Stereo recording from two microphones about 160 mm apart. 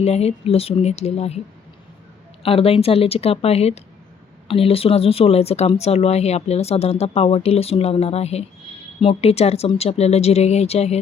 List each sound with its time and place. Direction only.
0.0 s speech: 40° left (ahead or behind)
2.4 s speech: 35° left (ahead or behind)